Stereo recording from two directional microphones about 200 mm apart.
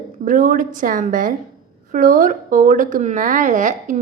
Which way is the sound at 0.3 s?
40° right (ahead or behind).